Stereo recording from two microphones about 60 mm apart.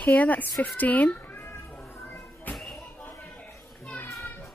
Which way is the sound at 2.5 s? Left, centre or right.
Centre.